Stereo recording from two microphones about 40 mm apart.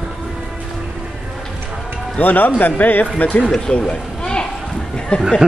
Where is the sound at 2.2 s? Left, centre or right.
Left.